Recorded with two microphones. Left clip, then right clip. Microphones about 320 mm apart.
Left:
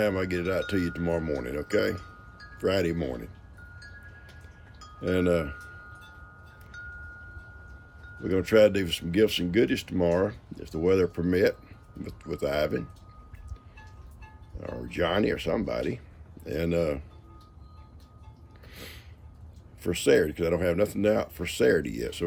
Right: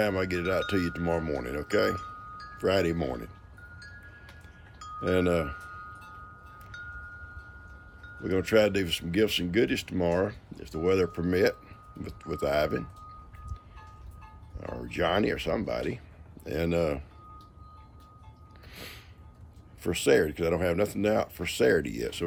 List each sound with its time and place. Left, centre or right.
0.0 s speech: centre
4.9 s speech: centre
6.7 s wind chime: centre
8.2 s speech: centre
14.6 s speech: centre
18.7 s a sound: centre
19.8 s speech: centre